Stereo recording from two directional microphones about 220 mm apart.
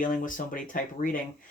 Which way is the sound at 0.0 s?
35° left (ahead or behind).